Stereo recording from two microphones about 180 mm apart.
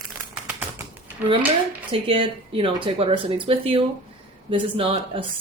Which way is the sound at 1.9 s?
30° right (ahead or behind).